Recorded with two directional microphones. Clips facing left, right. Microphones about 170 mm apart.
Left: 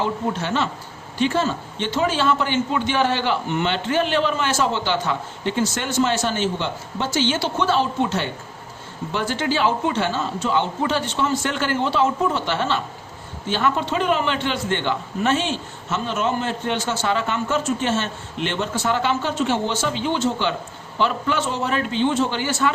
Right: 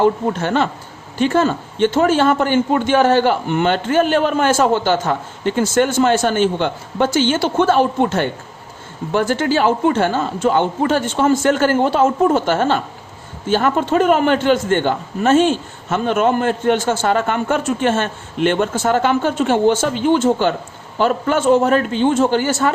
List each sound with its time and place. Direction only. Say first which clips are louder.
0.0 s a man's voice: right 8 dB; 55° right (ahead or behind)